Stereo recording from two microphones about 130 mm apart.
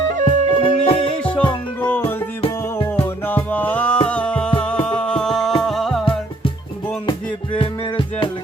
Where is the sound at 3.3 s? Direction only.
15° left (ahead or behind).